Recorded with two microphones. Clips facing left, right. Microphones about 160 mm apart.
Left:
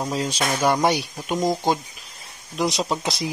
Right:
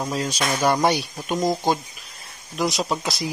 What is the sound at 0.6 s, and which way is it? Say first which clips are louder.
Speech: even; centre (ahead or behind).